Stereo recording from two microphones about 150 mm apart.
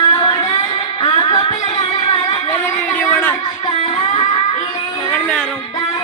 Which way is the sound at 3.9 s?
35° left (ahead or behind).